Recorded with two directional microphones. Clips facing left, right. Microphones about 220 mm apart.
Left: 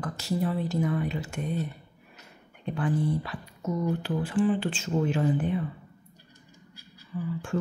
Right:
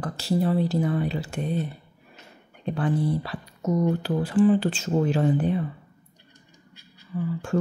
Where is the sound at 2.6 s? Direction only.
35° right (ahead or behind).